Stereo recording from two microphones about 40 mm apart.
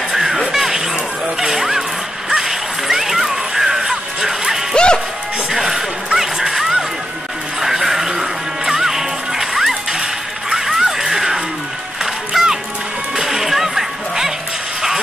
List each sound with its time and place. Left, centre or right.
0.1 s music: centre
4.7 s music: left
5.5 s a sound: centre
7.6 s music: centre